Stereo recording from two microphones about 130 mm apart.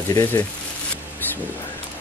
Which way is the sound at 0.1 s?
25° left (ahead or behind).